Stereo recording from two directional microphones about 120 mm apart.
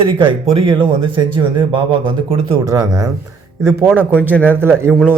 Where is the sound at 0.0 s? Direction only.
45° right (ahead or behind).